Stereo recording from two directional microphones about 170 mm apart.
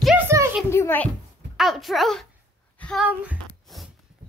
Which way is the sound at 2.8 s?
5° left (ahead or behind).